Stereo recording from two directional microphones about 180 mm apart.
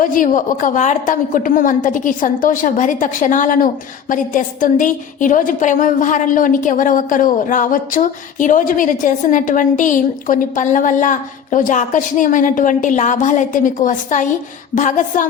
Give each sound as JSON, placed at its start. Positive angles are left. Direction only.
{"t": 0.0, "sound": "a woman's voice", "side_deg": 50}